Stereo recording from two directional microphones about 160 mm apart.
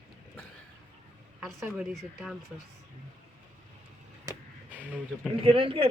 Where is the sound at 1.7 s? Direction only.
5° right (ahead or behind).